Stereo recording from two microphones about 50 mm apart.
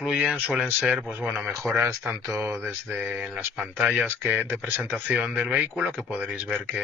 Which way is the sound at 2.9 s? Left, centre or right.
Right.